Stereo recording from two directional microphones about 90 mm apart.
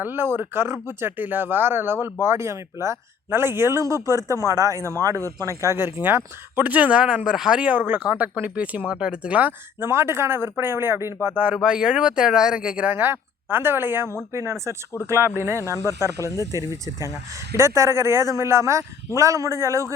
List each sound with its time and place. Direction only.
0.0 s speech: 25° right (ahead or behind)
9.8 s speech: 25° right (ahead or behind)
11.4 s speech: 10° right (ahead or behind)
12.9 s a woman's voice: 25° right (ahead or behind)
15.6 s speech: 35° left (ahead or behind)
16.5 s speech: 40° right (ahead or behind)